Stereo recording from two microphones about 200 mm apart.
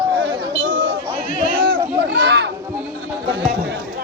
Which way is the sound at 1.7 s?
55° right (ahead or behind).